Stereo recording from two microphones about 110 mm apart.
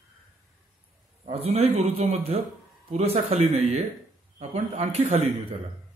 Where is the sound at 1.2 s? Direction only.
70° right (ahead or behind).